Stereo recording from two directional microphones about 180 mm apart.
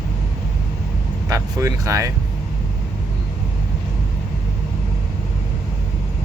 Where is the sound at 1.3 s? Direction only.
15° right (ahead or behind).